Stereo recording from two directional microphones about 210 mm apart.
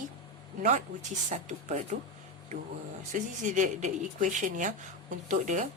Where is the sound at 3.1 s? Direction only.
35° right (ahead or behind).